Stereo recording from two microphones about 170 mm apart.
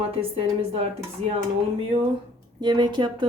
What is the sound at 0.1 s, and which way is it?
Speech, 35° right (ahead or behind).